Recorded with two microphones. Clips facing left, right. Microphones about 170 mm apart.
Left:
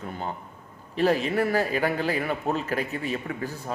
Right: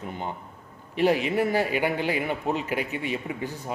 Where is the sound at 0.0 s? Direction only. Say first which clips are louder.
Even; 20° right (ahead or behind).